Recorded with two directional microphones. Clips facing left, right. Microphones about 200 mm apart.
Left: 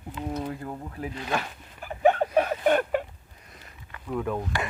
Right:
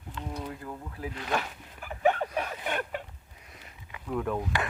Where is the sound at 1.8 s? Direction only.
30° left (ahead or behind).